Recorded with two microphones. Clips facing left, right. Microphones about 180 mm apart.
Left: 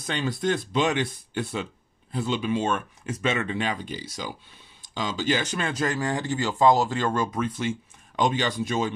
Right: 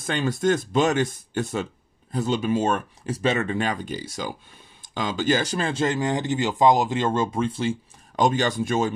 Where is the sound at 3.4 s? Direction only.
45° right (ahead or behind).